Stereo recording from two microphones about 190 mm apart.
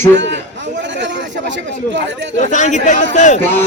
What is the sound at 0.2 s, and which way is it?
Chatter, 70° right (ahead or behind).